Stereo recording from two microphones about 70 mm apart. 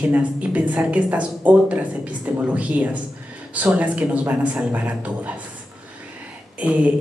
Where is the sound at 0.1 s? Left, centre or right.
Right.